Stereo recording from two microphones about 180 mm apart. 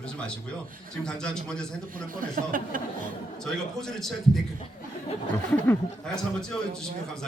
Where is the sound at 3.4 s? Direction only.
5° left (ahead or behind).